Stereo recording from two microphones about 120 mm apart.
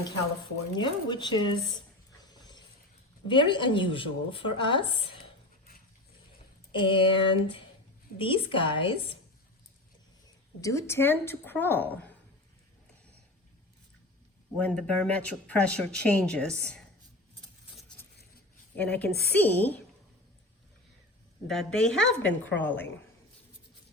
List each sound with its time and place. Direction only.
0.8 s speech: 40° left (ahead or behind)
2.3 s a sound: 35° left (ahead or behind)
3.2 s speech: 40° left (ahead or behind)
6.7 s speech: 45° left (ahead or behind)
10.6 s speech: 25° left (ahead or behind)
14.6 s speech: 10° left (ahead or behind)
18.8 s speech: 15° left (ahead or behind)
21.4 s a woman's voice: centre (ahead or behind)